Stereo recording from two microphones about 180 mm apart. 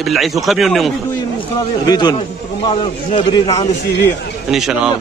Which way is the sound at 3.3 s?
20° left (ahead or behind).